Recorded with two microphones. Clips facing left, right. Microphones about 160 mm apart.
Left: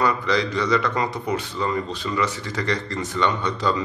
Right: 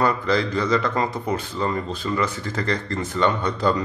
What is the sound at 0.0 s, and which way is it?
Speech, 50° right (ahead or behind).